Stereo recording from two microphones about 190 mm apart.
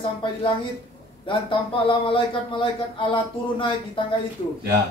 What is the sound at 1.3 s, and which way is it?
Speech, 25° left (ahead or behind).